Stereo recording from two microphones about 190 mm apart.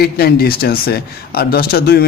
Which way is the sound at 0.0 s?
55° left (ahead or behind).